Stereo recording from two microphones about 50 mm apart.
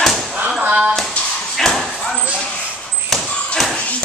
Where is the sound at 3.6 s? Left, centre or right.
Centre.